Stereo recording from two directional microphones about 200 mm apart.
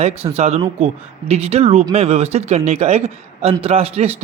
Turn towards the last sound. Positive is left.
turn(degrees=-30)  # may be behind; listen again after turning